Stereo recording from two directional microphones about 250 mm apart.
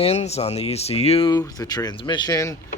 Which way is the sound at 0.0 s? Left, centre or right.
Left.